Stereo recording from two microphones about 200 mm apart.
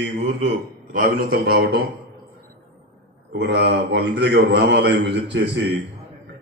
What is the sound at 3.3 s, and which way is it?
A man's voice, 55° right (ahead or behind).